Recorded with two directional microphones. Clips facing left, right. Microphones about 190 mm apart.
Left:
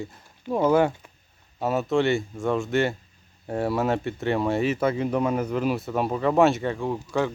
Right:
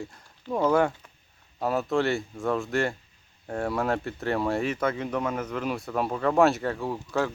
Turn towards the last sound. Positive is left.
turn(degrees=0)  # may be behind; listen again after turning